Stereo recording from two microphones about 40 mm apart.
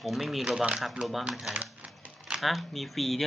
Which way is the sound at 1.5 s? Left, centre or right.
Right.